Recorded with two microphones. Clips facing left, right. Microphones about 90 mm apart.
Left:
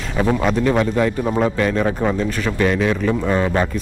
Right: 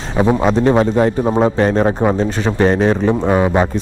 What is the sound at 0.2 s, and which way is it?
A man's voice, 20° right (ahead or behind).